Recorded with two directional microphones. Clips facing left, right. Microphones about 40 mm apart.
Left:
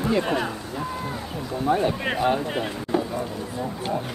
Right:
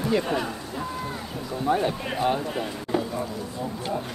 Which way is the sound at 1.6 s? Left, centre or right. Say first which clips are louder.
Left 2 dB; centre.